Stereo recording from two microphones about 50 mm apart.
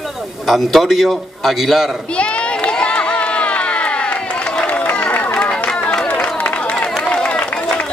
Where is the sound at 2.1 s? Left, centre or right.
Left.